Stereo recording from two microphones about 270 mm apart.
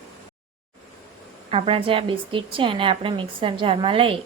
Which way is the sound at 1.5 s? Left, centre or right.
Right.